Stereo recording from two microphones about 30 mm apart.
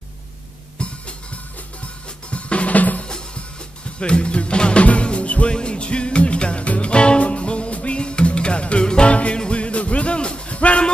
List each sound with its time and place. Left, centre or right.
0.8 s music: left
2.3 s drum: left
2.7 s drum: left
4.0 s music: left
8.0 s music: left